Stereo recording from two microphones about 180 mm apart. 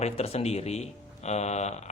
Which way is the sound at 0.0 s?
35° left (ahead or behind).